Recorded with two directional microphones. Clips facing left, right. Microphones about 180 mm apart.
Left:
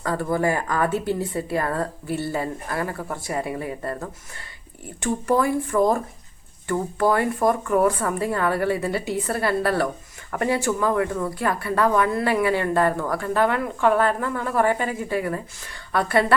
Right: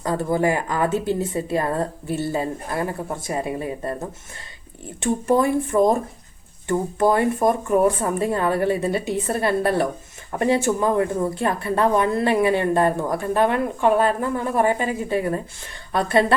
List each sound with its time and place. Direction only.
0.0 s speech: 20° right (ahead or behind)
4.9 s speech: 25° right (ahead or behind)